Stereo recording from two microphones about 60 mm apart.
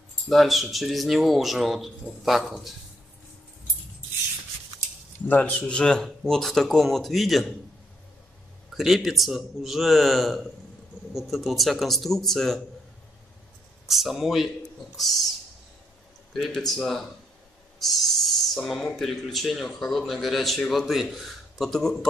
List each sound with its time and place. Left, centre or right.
0.3 s a man's voice: centre
5.3 s speech: left
5.6 s a man's voice: centre
8.7 s a man's voice: centre
13.8 s a man's voice: centre
16.3 s a man's voice: centre
17.7 s a sound: centre
18.7 s a man's voice: centre